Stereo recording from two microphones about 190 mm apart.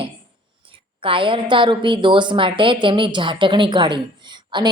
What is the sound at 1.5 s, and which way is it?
A woman's voice, 25° right (ahead or behind).